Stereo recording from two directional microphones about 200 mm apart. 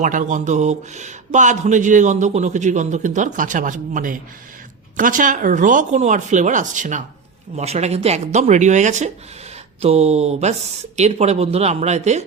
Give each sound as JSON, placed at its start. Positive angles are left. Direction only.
{"t": 0.0, "sound": "speech", "side_deg": -40}